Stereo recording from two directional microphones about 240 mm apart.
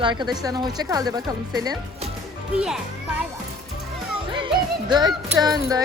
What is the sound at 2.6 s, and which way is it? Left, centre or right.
Speech, centre.